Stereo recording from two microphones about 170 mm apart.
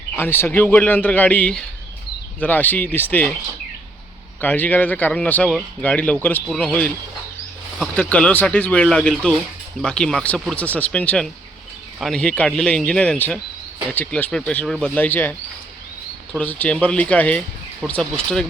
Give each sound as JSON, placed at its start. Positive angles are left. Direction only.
{"t": 0.2, "sound": "speech", "side_deg": 10}
{"t": 4.4, "sound": "speech", "side_deg": 10}
{"t": 7.8, "sound": "speech", "side_deg": 5}
{"t": 16.4, "sound": "speech", "side_deg": 10}